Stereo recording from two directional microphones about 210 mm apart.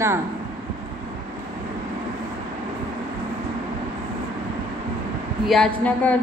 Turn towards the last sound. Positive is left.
turn(degrees=5)  # may be behind; listen again after turning